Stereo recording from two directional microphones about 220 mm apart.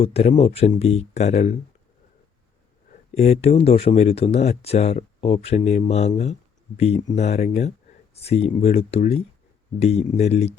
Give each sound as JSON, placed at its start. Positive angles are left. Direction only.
{"t": 0.0, "sound": "speech", "side_deg": 30}
{"t": 2.9, "sound": "speech", "side_deg": 30}